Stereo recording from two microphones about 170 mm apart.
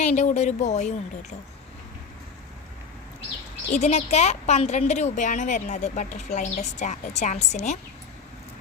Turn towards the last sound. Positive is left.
turn(degrees=45)  # may be behind; listen again after turning